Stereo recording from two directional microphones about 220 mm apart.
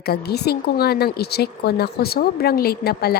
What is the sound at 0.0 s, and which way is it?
Speech, 45° left (ahead or behind).